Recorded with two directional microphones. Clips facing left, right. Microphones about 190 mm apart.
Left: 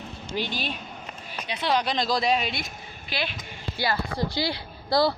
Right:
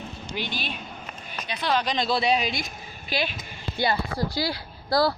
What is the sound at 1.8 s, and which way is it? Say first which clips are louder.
Speech: even; centre (ahead or behind).